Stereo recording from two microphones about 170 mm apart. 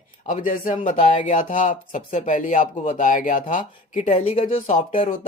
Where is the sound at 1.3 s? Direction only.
50° left (ahead or behind).